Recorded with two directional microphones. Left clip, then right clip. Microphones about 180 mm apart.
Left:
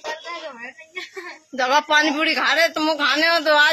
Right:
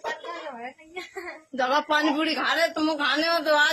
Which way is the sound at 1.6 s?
10° left (ahead or behind).